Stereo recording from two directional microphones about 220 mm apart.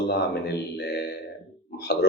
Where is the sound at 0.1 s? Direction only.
45° left (ahead or behind).